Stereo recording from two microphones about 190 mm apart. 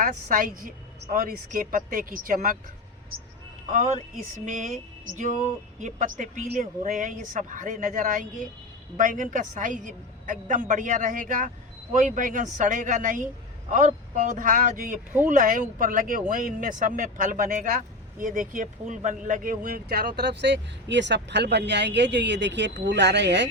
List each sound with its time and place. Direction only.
0.0 s a woman's voice: 45° right (ahead or behind)
3.7 s a woman's voice: 40° right (ahead or behind); by 23.5 s 65° right (ahead or behind)